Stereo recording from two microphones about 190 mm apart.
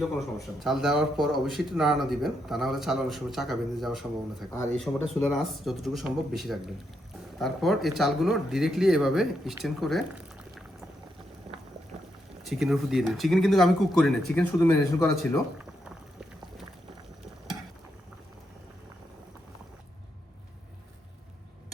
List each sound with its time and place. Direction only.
0.6 s speech: centre (ahead or behind)
12.5 s speech: centre (ahead or behind)
14.6 s speech: 15° left (ahead or behind)